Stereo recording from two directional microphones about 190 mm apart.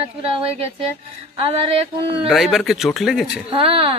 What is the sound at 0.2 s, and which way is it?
Speech, 30° right (ahead or behind).